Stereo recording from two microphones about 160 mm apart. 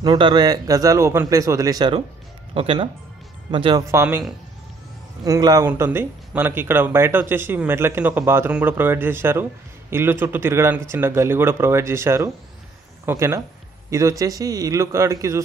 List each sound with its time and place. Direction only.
0.0 s a man's voice: 30° right (ahead or behind)
3.9 s speech: 15° right (ahead or behind)
5.2 s a man's voice: 25° right (ahead or behind)